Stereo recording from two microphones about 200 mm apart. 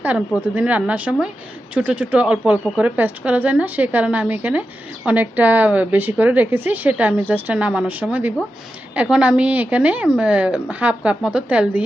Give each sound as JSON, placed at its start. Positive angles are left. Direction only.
{"t": 0.0, "sound": "a woman's voice", "side_deg": -10}